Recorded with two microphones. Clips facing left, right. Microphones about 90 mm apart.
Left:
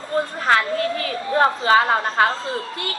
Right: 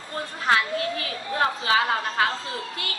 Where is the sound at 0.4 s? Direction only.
45° left (ahead or behind).